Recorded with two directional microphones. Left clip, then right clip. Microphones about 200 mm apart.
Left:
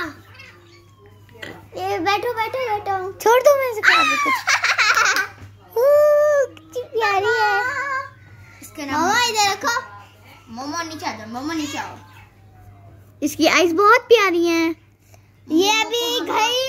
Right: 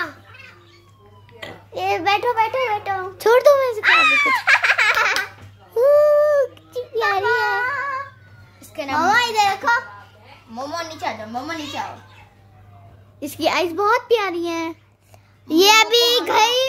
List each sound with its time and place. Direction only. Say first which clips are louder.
1.7 s child singing: right 2 dB; 30° right (ahead or behind)
3.2 s a child's voice: right 1 dB; 5° right (ahead or behind)
3.8 s a child's voice: right 1 dB; 15° right (ahead or behind)
4.5 s baby laughter: even; 20° right (ahead or behind)
5.8 s a sound: even; centre (ahead or behind)
7.0 s a sound: left 1 dB; 25° right (ahead or behind)
7.3 s child singing: left 2 dB; 10° left (ahead or behind)
7.6 s a sound: even; 5° right (ahead or behind)
8.7 s a woman's voice: right 2 dB; 30° right (ahead or behind)
9.1 s a child's voice: right 1 dB; 15° right (ahead or behind)
10.5 s a child's voice: even; 25° right (ahead or behind)
13.2 s a child's voice: left 4 dB; 10° left (ahead or behind)
15.4 s child singing: right 5 dB; 45° right (ahead or behind)